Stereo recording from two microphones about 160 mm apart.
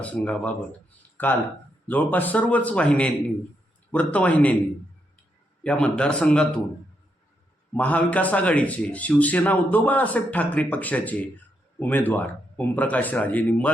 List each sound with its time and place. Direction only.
0.0 s a man's voice: 10° left (ahead or behind)
1.1 s a sound: 10° left (ahead or behind)
1.9 s a man's voice: 10° left (ahead or behind)
5.6 s a man's voice: 5° left (ahead or behind)
7.7 s a man's voice: 10° left (ahead or behind)